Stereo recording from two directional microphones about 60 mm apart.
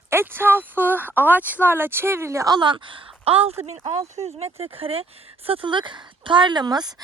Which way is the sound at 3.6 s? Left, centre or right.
Right.